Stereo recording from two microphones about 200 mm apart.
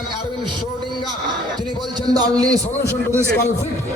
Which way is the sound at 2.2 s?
20° right (ahead or behind).